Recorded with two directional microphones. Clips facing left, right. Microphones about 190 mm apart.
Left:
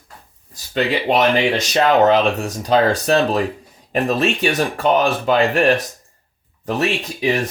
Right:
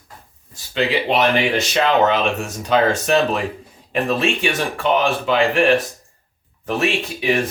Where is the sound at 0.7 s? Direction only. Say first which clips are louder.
Left 1 dB; 45° left (ahead or behind).